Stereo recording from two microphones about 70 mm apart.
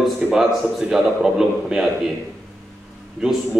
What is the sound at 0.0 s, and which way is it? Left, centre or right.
A man's voice, centre.